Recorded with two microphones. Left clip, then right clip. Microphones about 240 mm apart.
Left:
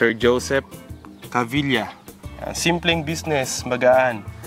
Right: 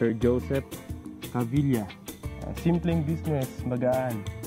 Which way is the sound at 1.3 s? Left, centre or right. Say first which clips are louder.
Left 8 dB; centre.